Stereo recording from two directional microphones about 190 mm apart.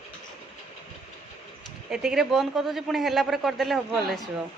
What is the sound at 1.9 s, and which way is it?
A man's voice, centre (ahead or behind).